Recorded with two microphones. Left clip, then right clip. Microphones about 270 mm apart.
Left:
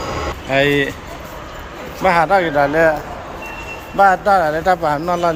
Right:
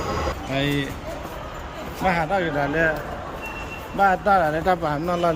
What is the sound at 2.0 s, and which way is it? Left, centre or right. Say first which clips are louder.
Speech: left 9 dB; centre.